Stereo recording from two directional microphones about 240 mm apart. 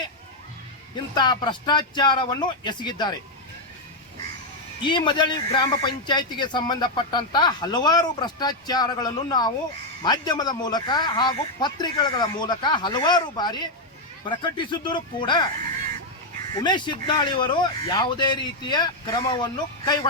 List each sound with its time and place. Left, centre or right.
0.9 s a man's voice: centre
4.8 s a man's voice: centre
16.6 s a man's voice: centre